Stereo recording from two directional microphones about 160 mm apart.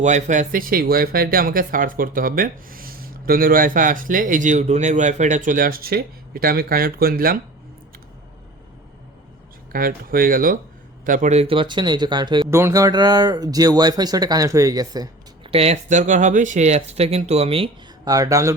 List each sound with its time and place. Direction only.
0.0 s speech: 50° right (ahead or behind); by 7.3 s 65° right (ahead or behind)
9.7 s speech: 65° right (ahead or behind); by 12.5 s 30° right (ahead or behind)
12.5 s speech: 15° right (ahead or behind)
15.4 s speech: 40° right (ahead or behind)
18.0 s speech: 20° right (ahead or behind)